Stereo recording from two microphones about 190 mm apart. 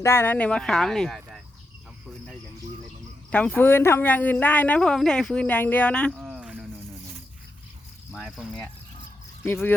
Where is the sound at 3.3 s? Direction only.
10° left (ahead or behind).